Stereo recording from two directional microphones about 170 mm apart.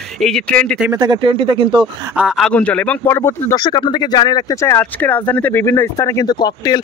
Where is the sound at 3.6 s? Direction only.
25° left (ahead or behind).